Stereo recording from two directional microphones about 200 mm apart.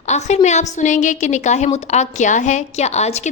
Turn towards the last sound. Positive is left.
turn(degrees=35)  # may be behind; listen again after turning